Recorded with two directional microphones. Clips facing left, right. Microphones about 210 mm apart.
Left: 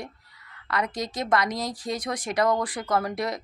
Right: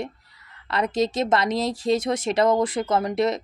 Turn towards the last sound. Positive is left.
turn(degrees=-25)  # may be behind; listen again after turning